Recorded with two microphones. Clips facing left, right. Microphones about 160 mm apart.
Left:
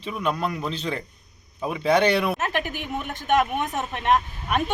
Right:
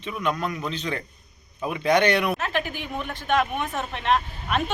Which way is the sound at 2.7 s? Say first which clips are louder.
Left 1 dB; 15° left (ahead or behind).